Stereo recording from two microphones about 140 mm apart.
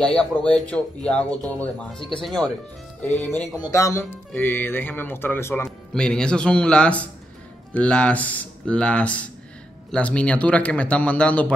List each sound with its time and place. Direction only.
0.0 s speech: 5° left (ahead or behind)
3.2 s speech: 15° left (ahead or behind)